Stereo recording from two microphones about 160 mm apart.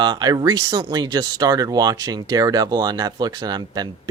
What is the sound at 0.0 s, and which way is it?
Speech, 25° right (ahead or behind).